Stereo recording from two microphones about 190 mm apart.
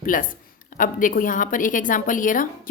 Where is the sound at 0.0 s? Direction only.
45° left (ahead or behind).